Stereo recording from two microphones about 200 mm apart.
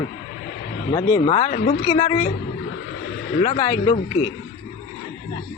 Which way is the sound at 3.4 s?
25° left (ahead or behind).